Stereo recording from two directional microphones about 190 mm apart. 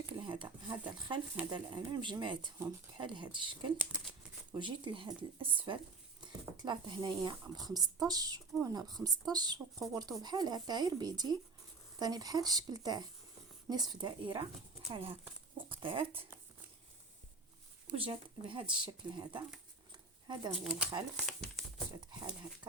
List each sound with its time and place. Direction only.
0.0 s a sound: 25° right (ahead or behind)
1.5 s speech: 25° right (ahead or behind)
3.8 s speech: centre (ahead or behind)
4.5 s speech: 25° right (ahead or behind)
17.9 s speech: 30° right (ahead or behind)
20.7 s speech: 5° right (ahead or behind)